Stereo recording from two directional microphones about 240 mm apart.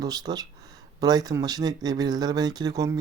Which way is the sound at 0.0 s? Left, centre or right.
Centre.